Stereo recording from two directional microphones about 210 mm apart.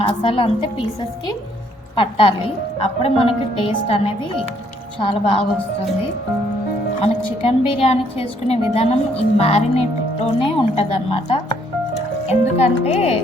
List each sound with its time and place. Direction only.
0.0 s a woman's voice: 25° left (ahead or behind)
2.0 s a woman's voice: 25° left (ahead or behind)
7.0 s a woman's voice: 25° left (ahead or behind)